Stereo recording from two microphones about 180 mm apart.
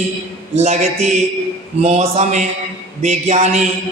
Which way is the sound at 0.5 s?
35° right (ahead or behind).